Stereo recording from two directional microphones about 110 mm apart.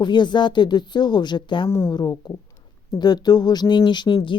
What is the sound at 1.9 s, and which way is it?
A woman's voice, 40° left (ahead or behind).